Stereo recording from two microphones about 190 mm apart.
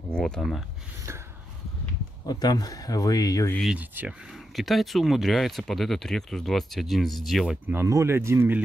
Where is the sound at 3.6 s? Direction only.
5° right (ahead or behind).